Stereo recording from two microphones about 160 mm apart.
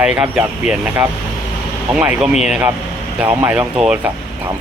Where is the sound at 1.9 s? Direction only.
10° right (ahead or behind).